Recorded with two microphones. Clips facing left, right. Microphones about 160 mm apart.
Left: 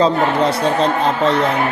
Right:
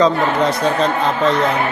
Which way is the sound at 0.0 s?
30° left (ahead or behind).